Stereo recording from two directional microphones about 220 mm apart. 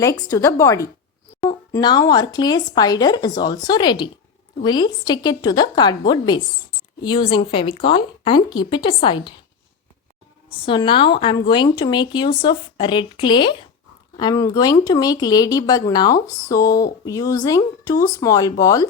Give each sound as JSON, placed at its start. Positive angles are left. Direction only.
{"t": 0.0, "sound": "speech", "side_deg": 15}
{"t": 10.6, "sound": "speech", "side_deg": 20}